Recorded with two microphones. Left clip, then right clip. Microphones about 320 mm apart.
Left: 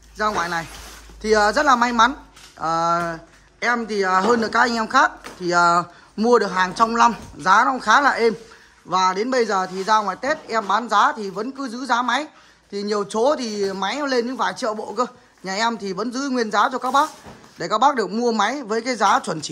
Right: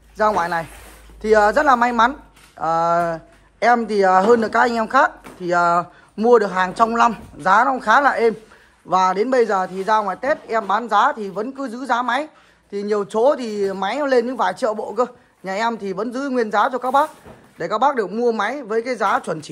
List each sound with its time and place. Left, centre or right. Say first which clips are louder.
0.2 s speech: right 4 dB; centre